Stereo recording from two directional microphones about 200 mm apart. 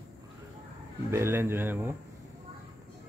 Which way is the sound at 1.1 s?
10° right (ahead or behind).